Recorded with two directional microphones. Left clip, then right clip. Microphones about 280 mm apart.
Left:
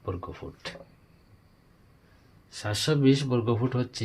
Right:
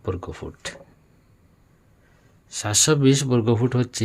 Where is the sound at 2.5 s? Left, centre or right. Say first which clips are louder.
Right 8 dB; right.